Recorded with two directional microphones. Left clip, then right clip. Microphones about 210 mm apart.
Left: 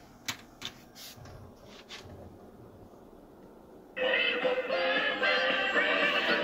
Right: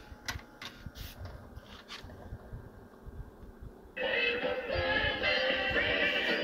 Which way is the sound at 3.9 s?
Centre (ahead or behind).